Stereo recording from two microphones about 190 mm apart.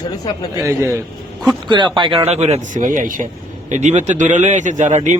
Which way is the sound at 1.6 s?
25° right (ahead or behind).